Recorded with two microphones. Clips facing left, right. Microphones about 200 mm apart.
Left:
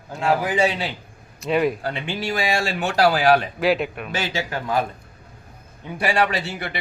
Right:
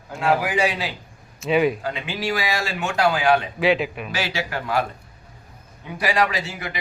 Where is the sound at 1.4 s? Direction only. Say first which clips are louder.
Right 1 dB; centre (ahead or behind).